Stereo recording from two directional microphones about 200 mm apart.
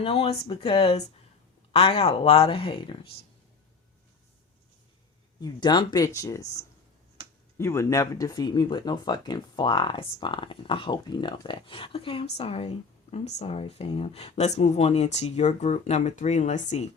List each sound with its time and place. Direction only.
0.0 s speech: 30° left (ahead or behind)
5.4 s speech: 20° left (ahead or behind)